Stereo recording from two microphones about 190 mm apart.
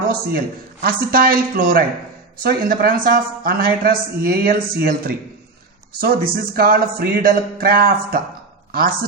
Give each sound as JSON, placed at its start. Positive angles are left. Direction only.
{"t": 0.1, "sound": "speech", "side_deg": -50}